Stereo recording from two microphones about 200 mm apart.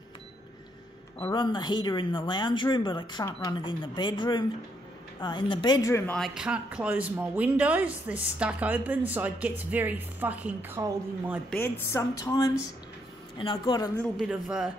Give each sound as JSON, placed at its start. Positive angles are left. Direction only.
{"t": 1.3, "sound": "speech", "side_deg": 25}
{"t": 11.5, "sound": "a woman's voice", "side_deg": 10}
{"t": 14.1, "sound": "speech", "side_deg": -5}